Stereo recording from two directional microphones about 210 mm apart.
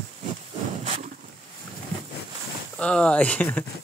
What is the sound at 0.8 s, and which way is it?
Boat, 35° right (ahead or behind).